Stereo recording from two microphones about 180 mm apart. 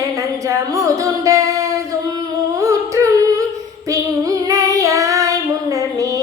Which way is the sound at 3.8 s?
20° right (ahead or behind).